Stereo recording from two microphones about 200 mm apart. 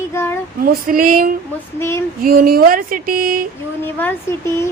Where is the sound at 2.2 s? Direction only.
45° right (ahead or behind).